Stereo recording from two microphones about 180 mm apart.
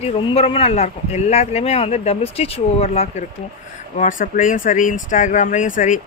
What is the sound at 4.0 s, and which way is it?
Speech, 45° left (ahead or behind).